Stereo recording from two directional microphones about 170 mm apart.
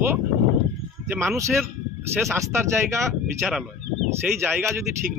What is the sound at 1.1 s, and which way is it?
Speech, 10° right (ahead or behind).